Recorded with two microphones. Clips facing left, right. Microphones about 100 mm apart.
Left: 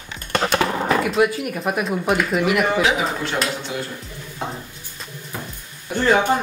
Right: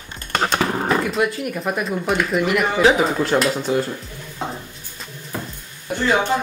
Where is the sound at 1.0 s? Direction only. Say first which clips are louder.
Left 2 dB; 5° left (ahead or behind).